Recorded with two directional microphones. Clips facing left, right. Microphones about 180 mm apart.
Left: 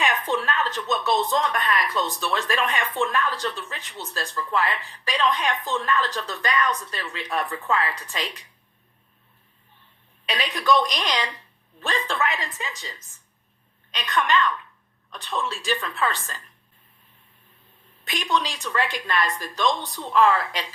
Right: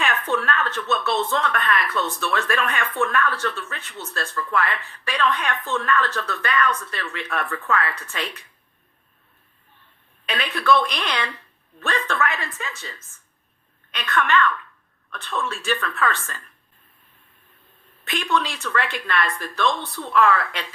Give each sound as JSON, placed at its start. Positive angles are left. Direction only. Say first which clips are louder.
{"t": 0.0, "sound": "a woman's voice", "louder": "right 1 dB", "side_deg": 15}
{"t": 10.3, "sound": "speech", "louder": "right 1 dB", "side_deg": 15}
{"t": 18.1, "sound": "speech", "louder": "right 2 dB", "side_deg": 15}